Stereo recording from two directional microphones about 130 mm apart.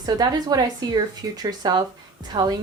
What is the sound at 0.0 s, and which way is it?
Speech, 30° right (ahead or behind).